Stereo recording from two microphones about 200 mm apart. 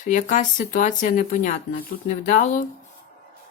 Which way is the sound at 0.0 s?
40° left (ahead or behind).